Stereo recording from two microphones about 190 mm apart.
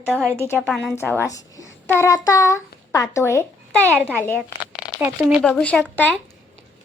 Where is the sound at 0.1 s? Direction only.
5° left (ahead or behind).